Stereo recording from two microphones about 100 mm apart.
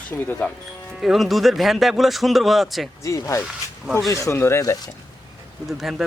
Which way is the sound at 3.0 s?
30° left (ahead or behind).